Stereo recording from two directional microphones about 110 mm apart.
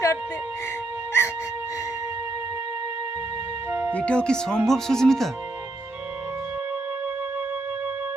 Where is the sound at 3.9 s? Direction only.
10° left (ahead or behind).